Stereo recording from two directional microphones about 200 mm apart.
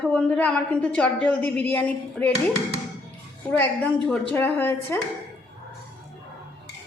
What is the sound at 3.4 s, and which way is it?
A woman's voice, 5° left (ahead or behind).